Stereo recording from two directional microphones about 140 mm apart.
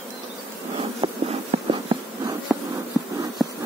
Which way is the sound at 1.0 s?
40° right (ahead or behind).